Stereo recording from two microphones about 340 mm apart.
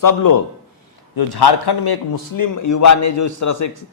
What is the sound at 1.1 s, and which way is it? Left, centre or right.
A man's voice, left.